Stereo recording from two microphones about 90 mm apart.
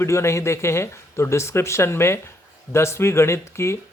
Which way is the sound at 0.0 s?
30° left (ahead or behind).